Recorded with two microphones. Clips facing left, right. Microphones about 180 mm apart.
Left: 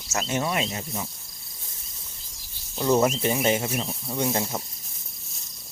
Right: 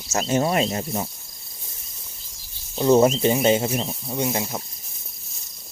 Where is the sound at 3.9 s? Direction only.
15° right (ahead or behind).